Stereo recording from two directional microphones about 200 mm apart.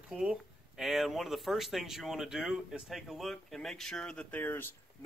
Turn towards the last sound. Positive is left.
turn(degrees=10)  # may be behind; listen again after turning